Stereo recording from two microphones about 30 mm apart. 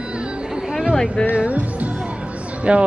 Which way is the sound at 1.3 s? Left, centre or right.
Right.